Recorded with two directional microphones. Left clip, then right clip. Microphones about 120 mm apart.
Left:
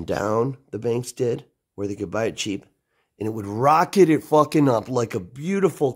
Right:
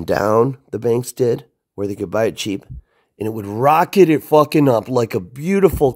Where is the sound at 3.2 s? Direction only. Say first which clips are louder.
Right 4 dB; 35° right (ahead or behind).